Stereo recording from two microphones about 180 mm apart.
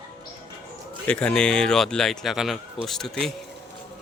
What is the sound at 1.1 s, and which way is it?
Speech, 5° left (ahead or behind).